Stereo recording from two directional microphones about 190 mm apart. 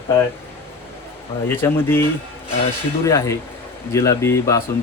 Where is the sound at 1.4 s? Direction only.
10° left (ahead or behind).